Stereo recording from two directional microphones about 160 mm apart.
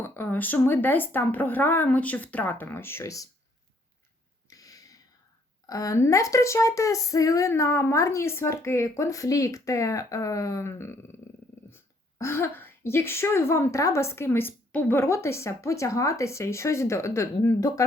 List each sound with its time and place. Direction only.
0.0 s a woman's voice: 15° left (ahead or behind)
4.4 s a sound: 20° left (ahead or behind)
5.6 s speech: 20° left (ahead or behind)
12.2 s a woman's voice: 15° left (ahead or behind)